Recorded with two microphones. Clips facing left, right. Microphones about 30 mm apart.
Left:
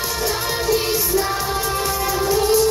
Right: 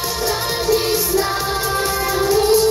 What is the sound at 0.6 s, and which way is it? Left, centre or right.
Music, centre.